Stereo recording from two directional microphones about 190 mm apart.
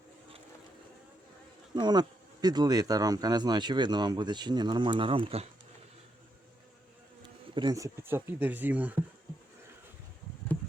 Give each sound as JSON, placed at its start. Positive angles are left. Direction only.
{"t": 1.7, "sound": "speech", "side_deg": -20}
{"t": 7.2, "sound": "speech", "side_deg": -25}